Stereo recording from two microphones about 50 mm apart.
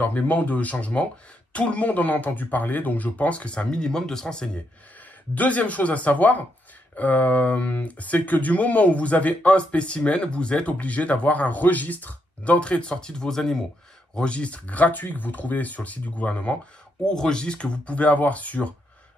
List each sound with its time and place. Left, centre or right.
0.0 s speech: left; by 4.5 s centre
5.3 s speech: left; by 13.6 s centre
14.1 s speech: left
17.0 s speech: centre; by 18.7 s left